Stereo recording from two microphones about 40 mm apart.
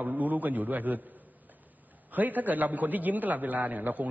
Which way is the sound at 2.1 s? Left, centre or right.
Right.